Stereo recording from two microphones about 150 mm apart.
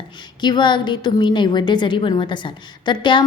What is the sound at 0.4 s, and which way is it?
A woman's voice, 30° left (ahead or behind).